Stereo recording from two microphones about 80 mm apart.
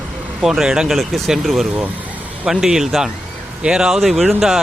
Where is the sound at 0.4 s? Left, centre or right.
Centre.